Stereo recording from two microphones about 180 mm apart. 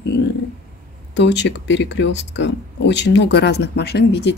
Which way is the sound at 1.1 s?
75° left (ahead or behind).